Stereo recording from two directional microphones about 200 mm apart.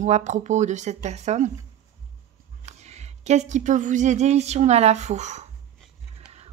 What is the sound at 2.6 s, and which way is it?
A woman's voice, 35° right (ahead or behind).